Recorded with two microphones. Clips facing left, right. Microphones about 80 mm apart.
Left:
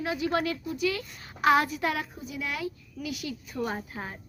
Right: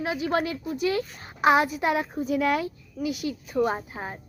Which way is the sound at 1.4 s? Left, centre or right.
Centre.